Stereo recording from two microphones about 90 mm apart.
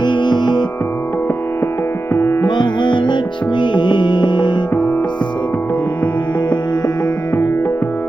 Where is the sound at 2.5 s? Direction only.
60° left (ahead or behind).